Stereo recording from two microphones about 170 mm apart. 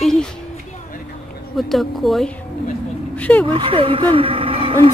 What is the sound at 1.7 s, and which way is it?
Speech, centre (ahead or behind).